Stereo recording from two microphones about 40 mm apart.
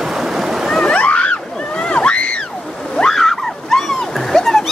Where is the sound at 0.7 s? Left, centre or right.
Centre.